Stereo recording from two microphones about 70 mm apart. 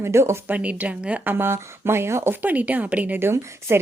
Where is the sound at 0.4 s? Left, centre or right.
Right.